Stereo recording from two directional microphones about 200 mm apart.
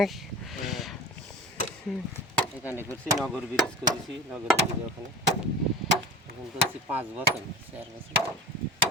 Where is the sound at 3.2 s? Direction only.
5° right (ahead or behind).